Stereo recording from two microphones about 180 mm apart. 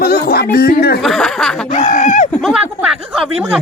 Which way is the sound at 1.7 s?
45° left (ahead or behind).